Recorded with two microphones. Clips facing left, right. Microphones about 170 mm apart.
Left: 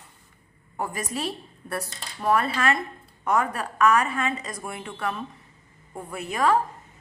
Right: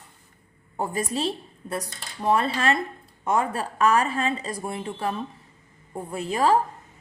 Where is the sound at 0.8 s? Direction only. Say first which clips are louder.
Right 3 dB; 25° right (ahead or behind).